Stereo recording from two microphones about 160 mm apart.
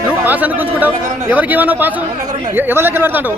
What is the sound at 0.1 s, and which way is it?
A man's voice, 10° right (ahead or behind).